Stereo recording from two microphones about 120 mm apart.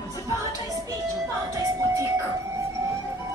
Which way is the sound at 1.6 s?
25° right (ahead or behind).